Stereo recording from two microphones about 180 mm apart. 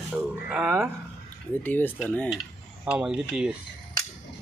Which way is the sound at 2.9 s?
5° right (ahead or behind).